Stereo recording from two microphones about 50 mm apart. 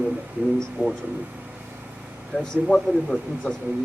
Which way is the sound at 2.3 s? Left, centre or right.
Centre.